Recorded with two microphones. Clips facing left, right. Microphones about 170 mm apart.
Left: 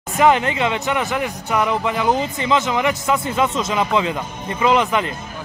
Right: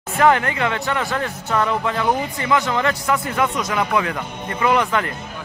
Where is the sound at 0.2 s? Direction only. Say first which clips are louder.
Left 1 dB; 20° left (ahead or behind).